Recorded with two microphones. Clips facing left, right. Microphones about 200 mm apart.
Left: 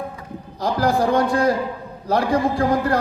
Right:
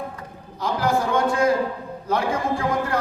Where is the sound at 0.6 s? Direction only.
35° left (ahead or behind).